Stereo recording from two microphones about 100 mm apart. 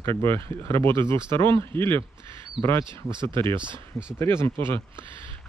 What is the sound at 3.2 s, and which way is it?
Speech, 55° right (ahead or behind).